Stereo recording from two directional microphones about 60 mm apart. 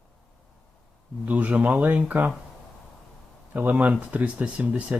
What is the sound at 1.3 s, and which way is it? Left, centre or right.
Speech, right.